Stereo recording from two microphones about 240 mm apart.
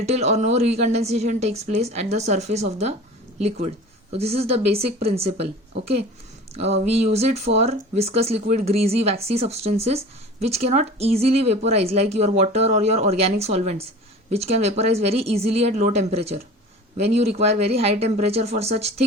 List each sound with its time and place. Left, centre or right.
0.0 s speech: right
4.1 s speech: right
6.5 s speech: right